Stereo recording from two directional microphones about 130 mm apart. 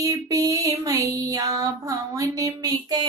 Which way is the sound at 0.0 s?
25° right (ahead or behind).